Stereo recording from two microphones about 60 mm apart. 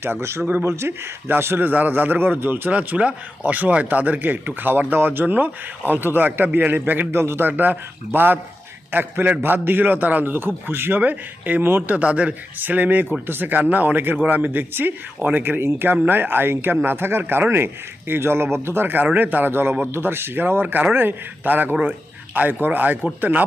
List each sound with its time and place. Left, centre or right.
0.0 s a man's voice: right
11.9 s a man's voice: right